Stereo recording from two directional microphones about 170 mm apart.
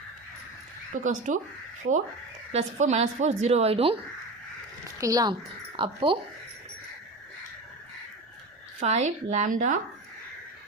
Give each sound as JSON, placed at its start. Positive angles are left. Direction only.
{"t": 0.9, "sound": "speech", "side_deg": -45}
{"t": 2.5, "sound": "a woman's voice", "side_deg": -40}
{"t": 4.9, "sound": "a woman's voice", "side_deg": -20}
{"t": 8.8, "sound": "speech", "side_deg": -40}